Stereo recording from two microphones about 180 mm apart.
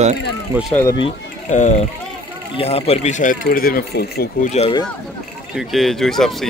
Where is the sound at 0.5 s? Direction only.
10° right (ahead or behind).